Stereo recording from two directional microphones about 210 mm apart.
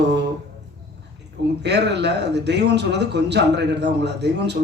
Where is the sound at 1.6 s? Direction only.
55° right (ahead or behind).